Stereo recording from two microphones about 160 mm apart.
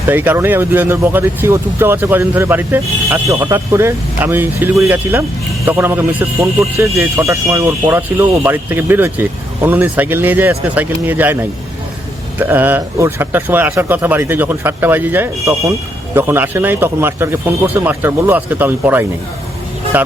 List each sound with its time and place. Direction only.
0.1 s speech: 10° right (ahead or behind)
12.4 s speech: 10° right (ahead or behind)